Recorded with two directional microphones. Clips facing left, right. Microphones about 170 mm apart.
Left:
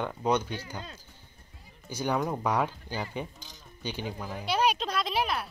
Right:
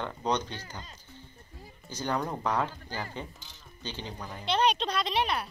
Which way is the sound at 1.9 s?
10° left (ahead or behind).